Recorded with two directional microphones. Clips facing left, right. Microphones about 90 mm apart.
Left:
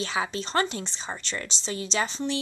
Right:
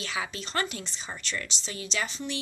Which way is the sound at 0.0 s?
30° left (ahead or behind).